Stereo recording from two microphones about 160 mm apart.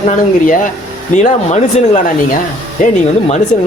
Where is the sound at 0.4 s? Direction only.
55° left (ahead or behind).